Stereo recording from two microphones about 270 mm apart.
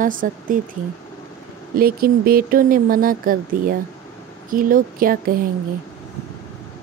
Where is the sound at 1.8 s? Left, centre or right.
Right.